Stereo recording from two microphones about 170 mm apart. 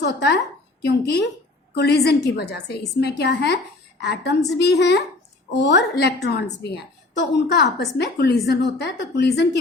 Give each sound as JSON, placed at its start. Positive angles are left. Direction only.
{"t": 0.0, "sound": "a woman's voice", "side_deg": 85}
{"t": 5.5, "sound": "a woman's voice", "side_deg": 90}